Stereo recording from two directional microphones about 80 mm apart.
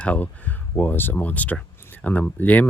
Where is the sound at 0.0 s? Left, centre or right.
Centre.